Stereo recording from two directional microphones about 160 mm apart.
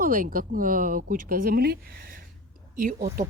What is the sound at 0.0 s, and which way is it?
Speech, 60° right (ahead or behind).